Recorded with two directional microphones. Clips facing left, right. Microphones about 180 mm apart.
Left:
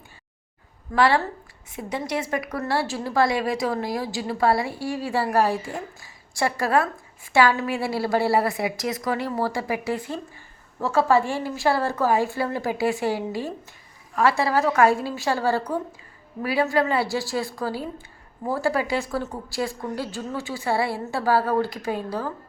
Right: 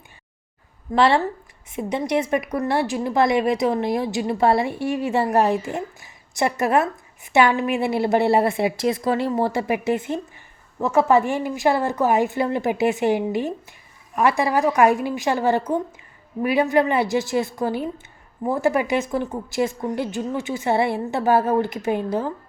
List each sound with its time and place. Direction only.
0.9 s a woman's voice: 25° right (ahead or behind)